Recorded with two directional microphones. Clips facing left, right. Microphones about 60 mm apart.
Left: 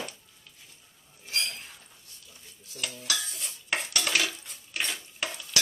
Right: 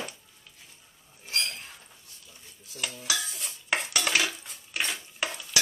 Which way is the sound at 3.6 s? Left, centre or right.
Right.